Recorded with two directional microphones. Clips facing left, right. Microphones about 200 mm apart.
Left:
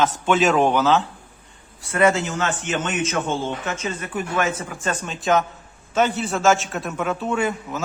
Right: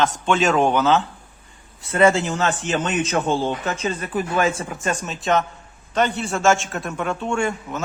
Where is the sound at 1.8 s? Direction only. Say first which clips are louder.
Right 2 dB; 25° right (ahead or behind).